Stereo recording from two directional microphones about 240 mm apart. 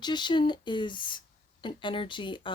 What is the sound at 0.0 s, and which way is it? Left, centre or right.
Speech, centre.